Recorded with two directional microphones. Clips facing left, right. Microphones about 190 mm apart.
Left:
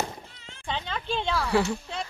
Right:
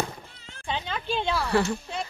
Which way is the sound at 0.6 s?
5° right (ahead or behind).